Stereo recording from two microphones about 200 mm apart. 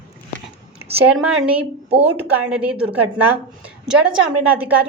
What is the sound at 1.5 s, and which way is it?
Speech, 30° right (ahead or behind).